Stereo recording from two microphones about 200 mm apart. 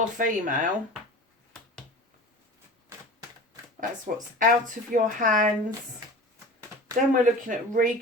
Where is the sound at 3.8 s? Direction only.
40° right (ahead or behind).